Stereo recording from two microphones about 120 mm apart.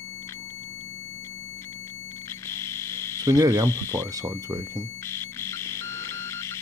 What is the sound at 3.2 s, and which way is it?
Speech, 30° right (ahead or behind).